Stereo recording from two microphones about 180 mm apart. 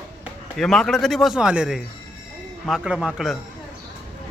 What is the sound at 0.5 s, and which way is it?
A man's voice, centre (ahead or behind).